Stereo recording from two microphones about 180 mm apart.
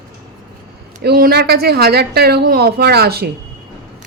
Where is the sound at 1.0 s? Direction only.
60° right (ahead or behind).